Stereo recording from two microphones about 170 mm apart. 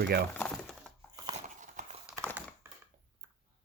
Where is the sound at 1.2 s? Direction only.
45° right (ahead or behind).